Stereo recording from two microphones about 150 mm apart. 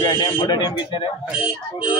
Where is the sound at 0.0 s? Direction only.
25° left (ahead or behind).